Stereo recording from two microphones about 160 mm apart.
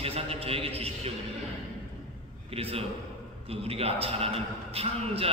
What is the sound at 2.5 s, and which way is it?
A man's voice, 40° right (ahead or behind).